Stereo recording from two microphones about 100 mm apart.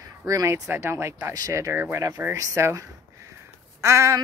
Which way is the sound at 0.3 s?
35° right (ahead or behind).